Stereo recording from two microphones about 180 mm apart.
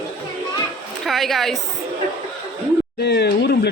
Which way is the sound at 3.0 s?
65° left (ahead or behind).